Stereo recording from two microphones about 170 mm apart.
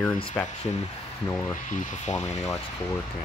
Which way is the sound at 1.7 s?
50° left (ahead or behind).